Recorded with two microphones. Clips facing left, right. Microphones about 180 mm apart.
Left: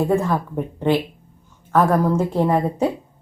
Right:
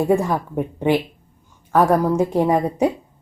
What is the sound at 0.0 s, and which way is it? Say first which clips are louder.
A woman's voice: right 1 dB; 15° right (ahead or behind).